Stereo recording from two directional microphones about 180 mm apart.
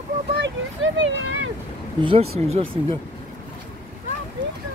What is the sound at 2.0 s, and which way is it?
Speech, 30° right (ahead or behind).